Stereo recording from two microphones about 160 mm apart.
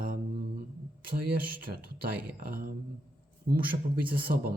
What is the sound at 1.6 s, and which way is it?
Speech, 70° right (ahead or behind).